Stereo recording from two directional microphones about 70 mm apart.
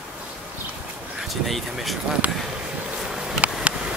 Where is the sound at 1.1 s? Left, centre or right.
Centre.